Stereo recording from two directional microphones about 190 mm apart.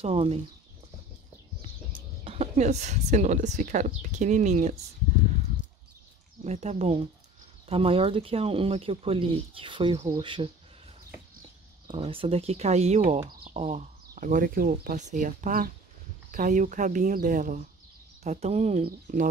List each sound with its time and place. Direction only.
0.0 s speech: 30° right (ahead or behind)
2.2 s speech: 30° right (ahead or behind)
6.4 s speech: 35° right (ahead or behind)
11.9 s speech: 30° right (ahead or behind)
13.3 s a sound: 50° right (ahead or behind)
13.6 s speech: 35° right (ahead or behind)